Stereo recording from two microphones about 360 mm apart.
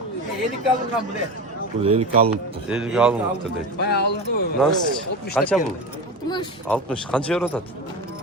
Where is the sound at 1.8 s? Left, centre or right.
Centre.